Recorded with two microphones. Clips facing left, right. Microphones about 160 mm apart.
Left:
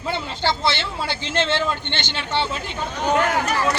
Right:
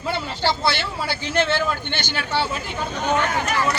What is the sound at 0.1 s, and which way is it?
A man's voice, 20° left (ahead or behind).